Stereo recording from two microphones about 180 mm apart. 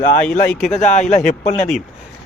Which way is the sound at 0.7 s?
40° left (ahead or behind).